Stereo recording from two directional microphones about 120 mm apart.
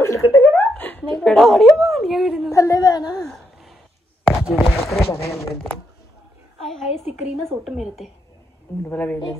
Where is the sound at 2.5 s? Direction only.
30° left (ahead or behind).